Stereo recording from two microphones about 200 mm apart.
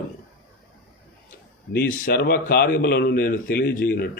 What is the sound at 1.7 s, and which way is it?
A man's voice, 50° left (ahead or behind).